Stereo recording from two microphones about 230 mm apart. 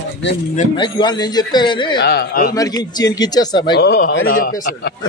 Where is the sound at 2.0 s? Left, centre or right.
Left.